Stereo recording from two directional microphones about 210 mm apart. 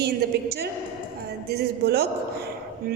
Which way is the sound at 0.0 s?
50° right (ahead or behind).